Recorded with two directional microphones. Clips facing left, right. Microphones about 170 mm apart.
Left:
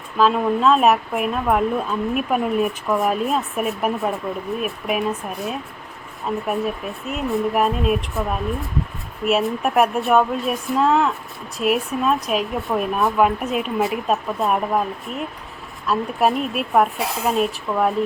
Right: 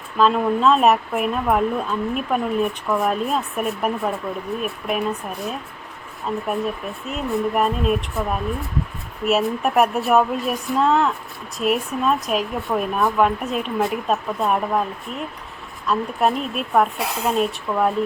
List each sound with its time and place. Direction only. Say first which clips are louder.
0.2 s speech: even; centre (ahead or behind)
6.3 s speech: left 1 dB; 5° left (ahead or behind)
15.9 s speech: left 1 dB; 5° left (ahead or behind)